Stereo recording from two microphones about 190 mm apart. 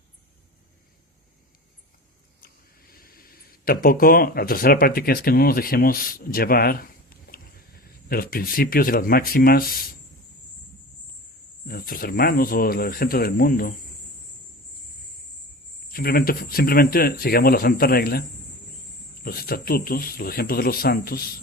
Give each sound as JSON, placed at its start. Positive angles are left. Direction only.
{"t": 2.4, "sound": "speech", "side_deg": 50}
{"t": 11.7, "sound": "speech", "side_deg": 50}
{"t": 15.9, "sound": "speech", "side_deg": 50}
{"t": 19.2, "sound": "speech", "side_deg": 50}